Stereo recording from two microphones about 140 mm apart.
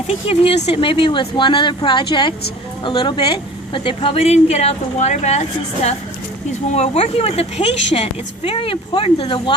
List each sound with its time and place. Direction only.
0.1 s a woman's voice: 45° left (ahead or behind)